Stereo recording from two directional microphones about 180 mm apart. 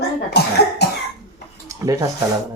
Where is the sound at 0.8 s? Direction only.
65° left (ahead or behind).